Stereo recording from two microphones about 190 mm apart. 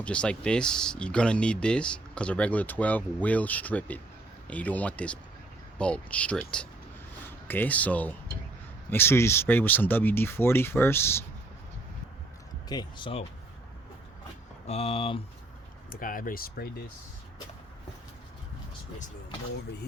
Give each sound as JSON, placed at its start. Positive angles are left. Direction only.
{"t": 0.0, "sound": "speech", "side_deg": 5}
{"t": 7.4, "sound": "speech", "side_deg": 10}
{"t": 12.6, "sound": "speech", "side_deg": 20}
{"t": 14.7, "sound": "speech", "side_deg": 30}
{"t": 15.9, "sound": "speech", "side_deg": 45}